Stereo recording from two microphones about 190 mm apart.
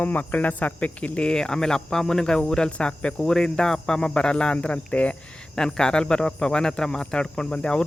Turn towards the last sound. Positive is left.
turn(degrees=5)  # may be behind; listen again after turning